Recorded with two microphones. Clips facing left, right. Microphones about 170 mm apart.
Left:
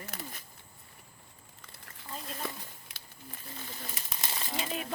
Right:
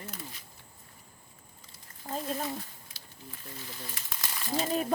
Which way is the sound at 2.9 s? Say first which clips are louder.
Even; 70° left (ahead or behind).